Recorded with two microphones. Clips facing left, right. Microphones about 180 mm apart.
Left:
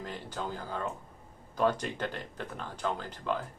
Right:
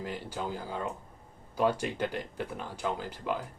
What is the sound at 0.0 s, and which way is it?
Speech, 10° right (ahead or behind).